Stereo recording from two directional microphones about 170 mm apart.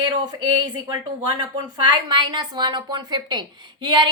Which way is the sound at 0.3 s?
30° right (ahead or behind).